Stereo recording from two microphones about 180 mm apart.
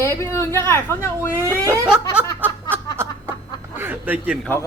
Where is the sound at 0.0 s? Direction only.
15° left (ahead or behind).